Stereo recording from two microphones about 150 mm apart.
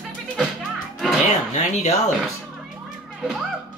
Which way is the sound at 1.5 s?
50° left (ahead or behind).